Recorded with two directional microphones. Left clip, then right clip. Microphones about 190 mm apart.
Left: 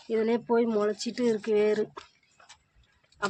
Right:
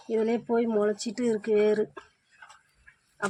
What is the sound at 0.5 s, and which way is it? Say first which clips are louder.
Speech: even; 20° right (ahead or behind).